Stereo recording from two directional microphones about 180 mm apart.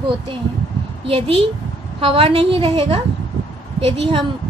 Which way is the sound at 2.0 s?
30° right (ahead or behind).